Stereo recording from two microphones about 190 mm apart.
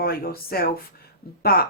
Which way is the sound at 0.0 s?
55° left (ahead or behind).